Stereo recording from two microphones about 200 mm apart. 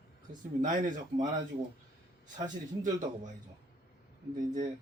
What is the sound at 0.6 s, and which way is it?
Speech, 40° right (ahead or behind).